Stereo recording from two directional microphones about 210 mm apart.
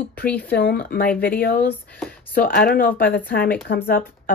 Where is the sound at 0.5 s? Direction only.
50° left (ahead or behind).